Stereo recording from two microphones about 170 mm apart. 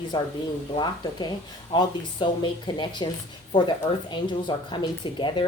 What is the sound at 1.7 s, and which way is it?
Speech, 30° left (ahead or behind).